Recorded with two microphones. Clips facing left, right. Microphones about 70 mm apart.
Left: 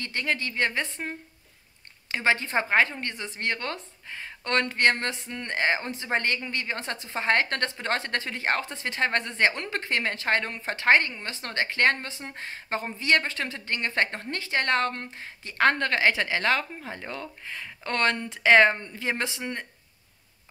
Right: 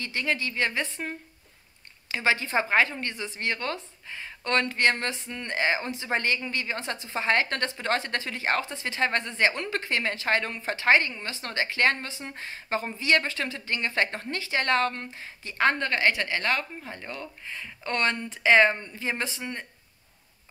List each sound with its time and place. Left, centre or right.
0.0 s speech: left
17.5 s speech: left